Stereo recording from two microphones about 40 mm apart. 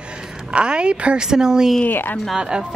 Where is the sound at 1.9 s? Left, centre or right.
Left.